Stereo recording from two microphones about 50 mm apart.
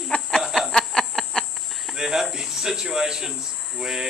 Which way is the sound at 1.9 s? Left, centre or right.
Centre.